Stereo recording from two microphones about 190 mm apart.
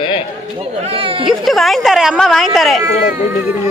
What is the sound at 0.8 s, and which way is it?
Speech, 30° right (ahead or behind).